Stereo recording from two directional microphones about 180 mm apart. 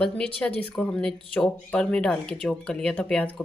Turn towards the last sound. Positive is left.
turn(degrees=5)  # may be behind; listen again after turning